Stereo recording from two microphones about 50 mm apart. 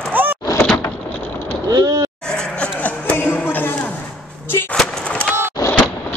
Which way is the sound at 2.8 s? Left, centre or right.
Left.